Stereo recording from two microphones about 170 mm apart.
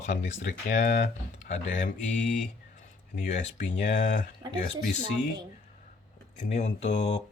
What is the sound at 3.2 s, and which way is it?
Speech, 45° left (ahead or behind).